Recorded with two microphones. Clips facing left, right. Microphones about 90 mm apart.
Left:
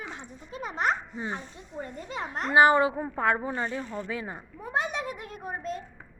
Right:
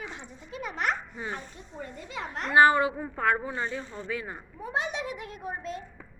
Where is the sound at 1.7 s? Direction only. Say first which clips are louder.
Left 3 dB; 40° left (ahead or behind).